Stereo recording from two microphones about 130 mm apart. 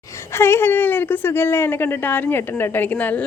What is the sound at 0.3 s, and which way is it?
Speech, 20° left (ahead or behind).